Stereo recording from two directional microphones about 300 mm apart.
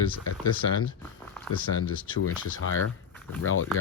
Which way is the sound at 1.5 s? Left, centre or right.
Left.